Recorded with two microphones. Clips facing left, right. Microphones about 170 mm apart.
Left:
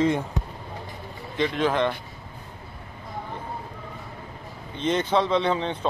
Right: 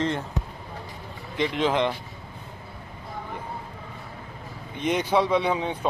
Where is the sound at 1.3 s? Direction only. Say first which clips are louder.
Even; 20° right (ahead or behind).